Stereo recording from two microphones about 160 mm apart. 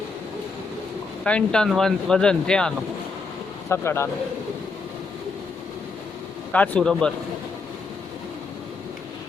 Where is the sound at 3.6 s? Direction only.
15° left (ahead or behind).